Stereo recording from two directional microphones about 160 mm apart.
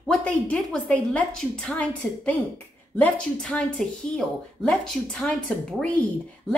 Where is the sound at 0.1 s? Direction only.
5° left (ahead or behind).